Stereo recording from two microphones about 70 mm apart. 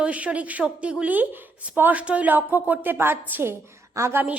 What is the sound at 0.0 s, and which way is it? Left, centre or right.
A woman's voice, centre.